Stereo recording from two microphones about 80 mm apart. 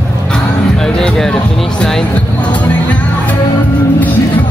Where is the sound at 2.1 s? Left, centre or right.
Centre.